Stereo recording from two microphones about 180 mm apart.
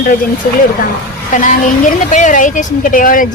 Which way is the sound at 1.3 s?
45° left (ahead or behind).